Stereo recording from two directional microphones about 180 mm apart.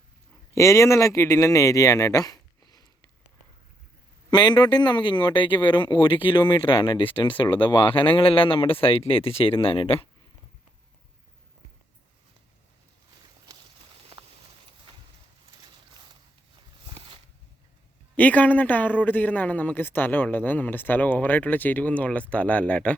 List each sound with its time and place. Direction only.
0.5 s speech: 15° left (ahead or behind)
4.3 s speech: 25° left (ahead or behind)
16.8 s a sound: 30° right (ahead or behind)
18.2 s a man's voice: 10° left (ahead or behind)